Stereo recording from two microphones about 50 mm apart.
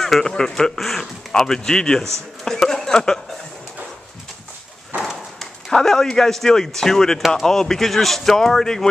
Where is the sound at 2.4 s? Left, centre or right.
Centre.